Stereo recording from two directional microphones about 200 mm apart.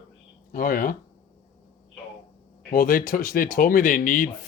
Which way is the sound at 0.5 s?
45° left (ahead or behind).